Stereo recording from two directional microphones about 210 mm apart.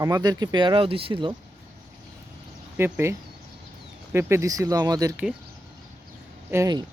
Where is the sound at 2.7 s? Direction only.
10° right (ahead or behind).